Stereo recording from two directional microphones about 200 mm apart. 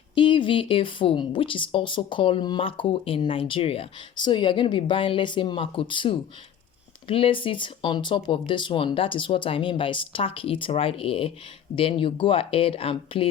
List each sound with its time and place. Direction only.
0.1 s speech: 25° left (ahead or behind)